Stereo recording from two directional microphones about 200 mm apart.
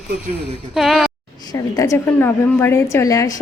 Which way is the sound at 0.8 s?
Centre (ahead or behind).